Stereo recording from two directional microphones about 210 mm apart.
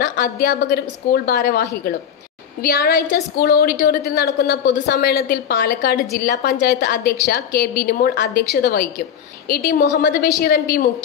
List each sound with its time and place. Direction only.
0.0 s a woman's voice: 50° left (ahead or behind)